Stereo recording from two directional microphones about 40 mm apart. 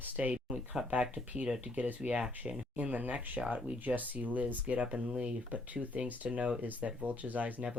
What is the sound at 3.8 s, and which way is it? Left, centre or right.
Speech, right.